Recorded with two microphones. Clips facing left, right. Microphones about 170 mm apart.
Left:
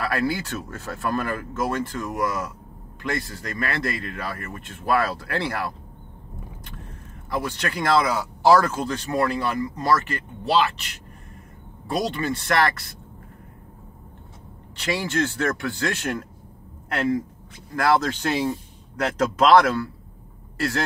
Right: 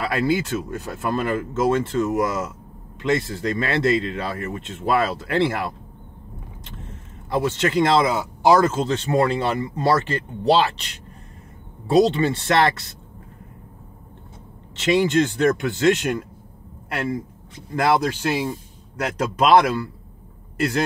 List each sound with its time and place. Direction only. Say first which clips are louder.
0.0 s speech: right 3 dB; 20° right (ahead or behind)
11.9 s speech: right 8 dB; 25° right (ahead or behind)
14.8 s speech: right 7 dB; 20° right (ahead or behind)
17.7 s speech: right 1 dB; 20° right (ahead or behind)